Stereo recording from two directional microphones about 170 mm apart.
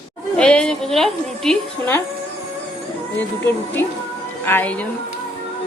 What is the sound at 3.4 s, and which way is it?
A woman's voice, 10° left (ahead or behind).